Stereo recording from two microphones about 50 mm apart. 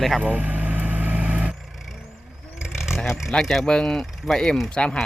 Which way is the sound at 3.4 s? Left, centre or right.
Centre.